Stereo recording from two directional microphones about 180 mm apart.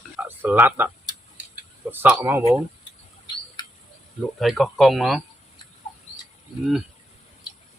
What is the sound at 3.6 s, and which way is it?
Cricket, 20° left (ahead or behind).